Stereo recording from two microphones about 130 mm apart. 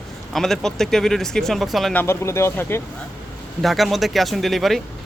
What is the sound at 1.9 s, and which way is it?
Speech, 20° left (ahead or behind).